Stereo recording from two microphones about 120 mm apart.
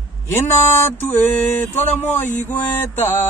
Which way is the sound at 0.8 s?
15° left (ahead or behind).